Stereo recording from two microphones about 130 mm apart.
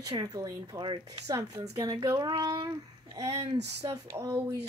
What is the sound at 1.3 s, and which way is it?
Speech, 25° right (ahead or behind).